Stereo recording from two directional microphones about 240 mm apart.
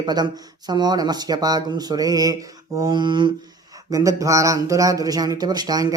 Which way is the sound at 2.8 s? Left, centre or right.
Centre.